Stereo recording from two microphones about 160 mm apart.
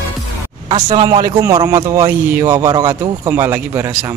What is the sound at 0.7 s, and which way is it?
Speech, 35° right (ahead or behind).